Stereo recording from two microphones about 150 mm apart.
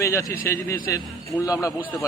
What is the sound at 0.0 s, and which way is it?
A man's voice, 20° left (ahead or behind).